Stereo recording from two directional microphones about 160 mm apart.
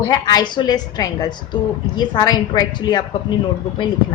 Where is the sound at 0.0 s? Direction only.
25° left (ahead or behind).